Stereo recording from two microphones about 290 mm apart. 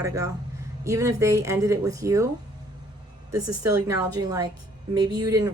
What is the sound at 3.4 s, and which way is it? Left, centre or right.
Speech, right.